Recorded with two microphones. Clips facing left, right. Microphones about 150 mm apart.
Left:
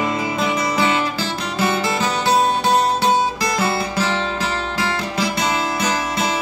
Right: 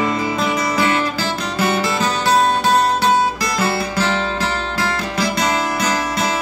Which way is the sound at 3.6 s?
20° left (ahead or behind).